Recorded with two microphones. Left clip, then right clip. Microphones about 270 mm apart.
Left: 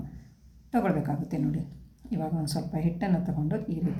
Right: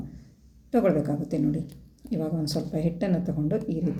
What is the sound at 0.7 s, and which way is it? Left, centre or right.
Speech, centre.